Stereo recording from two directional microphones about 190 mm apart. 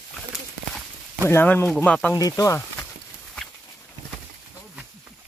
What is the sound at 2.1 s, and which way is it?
Speech, 20° left (ahead or behind).